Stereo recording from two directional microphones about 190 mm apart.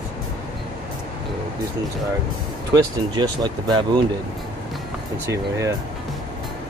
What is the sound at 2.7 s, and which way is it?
Speech, 25° right (ahead or behind).